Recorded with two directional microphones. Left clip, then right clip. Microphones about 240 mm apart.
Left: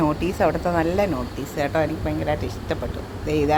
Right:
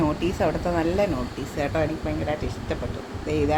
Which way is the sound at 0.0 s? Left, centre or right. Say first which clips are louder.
Left 3 dB; centre.